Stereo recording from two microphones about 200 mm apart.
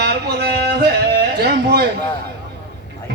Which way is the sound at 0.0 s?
55° right (ahead or behind).